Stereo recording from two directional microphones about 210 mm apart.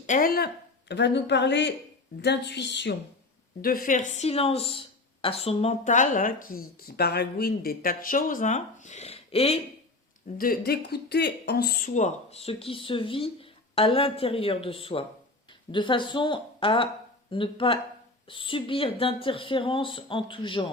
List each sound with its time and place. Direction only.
0.0 s a woman's voice: 40° left (ahead or behind); by 2.9 s 55° left (ahead or behind)
3.6 s speech: 45° left (ahead or behind); by 9.6 s 30° left (ahead or behind)
10.3 s speech: 45° left (ahead or behind); by 20.7 s 25° left (ahead or behind)